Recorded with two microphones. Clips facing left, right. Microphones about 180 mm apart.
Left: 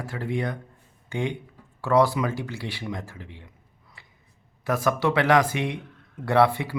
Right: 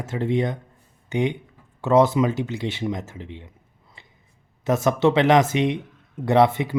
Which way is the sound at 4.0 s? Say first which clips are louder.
Right 3 dB; 25° right (ahead or behind).